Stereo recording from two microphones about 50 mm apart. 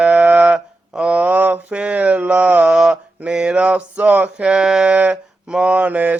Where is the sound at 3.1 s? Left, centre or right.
Centre.